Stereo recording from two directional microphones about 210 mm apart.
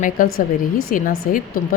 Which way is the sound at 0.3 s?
75° left (ahead or behind).